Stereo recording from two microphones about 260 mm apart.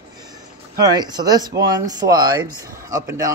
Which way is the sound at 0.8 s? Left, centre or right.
Centre.